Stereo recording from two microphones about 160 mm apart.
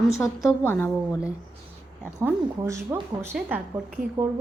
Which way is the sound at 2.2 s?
15° right (ahead or behind).